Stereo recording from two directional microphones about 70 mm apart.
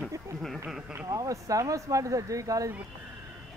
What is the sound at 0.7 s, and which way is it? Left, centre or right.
Speech, centre.